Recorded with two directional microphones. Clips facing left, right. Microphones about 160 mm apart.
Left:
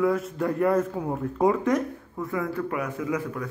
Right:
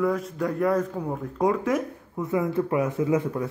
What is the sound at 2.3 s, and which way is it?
Speech, 25° right (ahead or behind).